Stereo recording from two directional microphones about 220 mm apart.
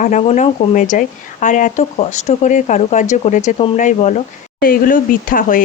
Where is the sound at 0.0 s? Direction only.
30° left (ahead or behind).